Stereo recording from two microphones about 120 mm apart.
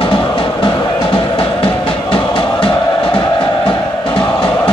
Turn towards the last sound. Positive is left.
turn(degrees=45)  # may be behind; listen again after turning